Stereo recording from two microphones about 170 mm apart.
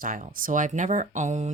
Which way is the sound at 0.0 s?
55° right (ahead or behind).